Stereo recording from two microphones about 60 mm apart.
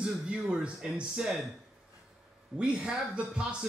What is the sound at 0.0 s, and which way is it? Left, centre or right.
A man's voice, centre.